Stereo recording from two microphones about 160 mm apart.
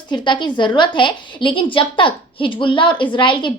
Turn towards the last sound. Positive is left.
turn(degrees=30)  # may be behind; listen again after turning